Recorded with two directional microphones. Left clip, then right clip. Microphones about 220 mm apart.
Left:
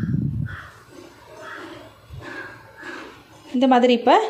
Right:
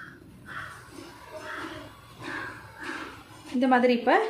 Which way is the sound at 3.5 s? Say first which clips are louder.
Left 6 dB; 35° left (ahead or behind).